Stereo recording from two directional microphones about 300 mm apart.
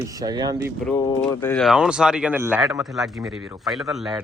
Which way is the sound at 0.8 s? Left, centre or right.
Centre.